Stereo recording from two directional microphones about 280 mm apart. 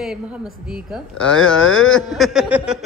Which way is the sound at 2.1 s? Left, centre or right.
Centre.